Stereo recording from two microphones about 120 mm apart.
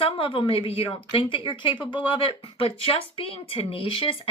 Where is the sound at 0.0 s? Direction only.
45° left (ahead or behind).